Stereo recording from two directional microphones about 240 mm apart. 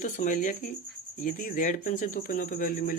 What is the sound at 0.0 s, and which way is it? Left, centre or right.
Speech, left.